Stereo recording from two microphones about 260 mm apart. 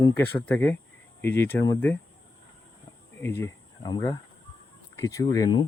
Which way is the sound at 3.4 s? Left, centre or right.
Centre.